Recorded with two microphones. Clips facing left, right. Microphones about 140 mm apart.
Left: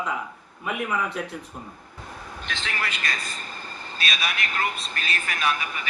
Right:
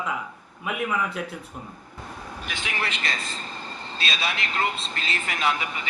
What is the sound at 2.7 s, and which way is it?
A man's voice, 25° right (ahead or behind).